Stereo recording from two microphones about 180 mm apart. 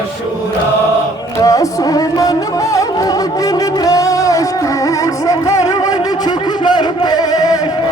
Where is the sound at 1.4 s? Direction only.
20° left (ahead or behind).